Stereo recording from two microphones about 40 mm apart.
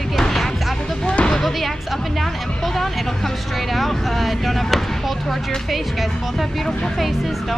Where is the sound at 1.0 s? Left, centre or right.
Left.